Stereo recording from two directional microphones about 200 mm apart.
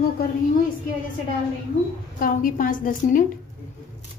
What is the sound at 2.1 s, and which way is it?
A child's voice, 45° left (ahead or behind).